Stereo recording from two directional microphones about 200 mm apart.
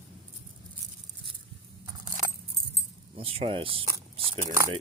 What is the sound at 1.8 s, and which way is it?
Keys jangling, 20° right (ahead or behind).